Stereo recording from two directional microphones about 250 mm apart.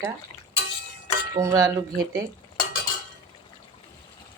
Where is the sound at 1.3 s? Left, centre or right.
Centre.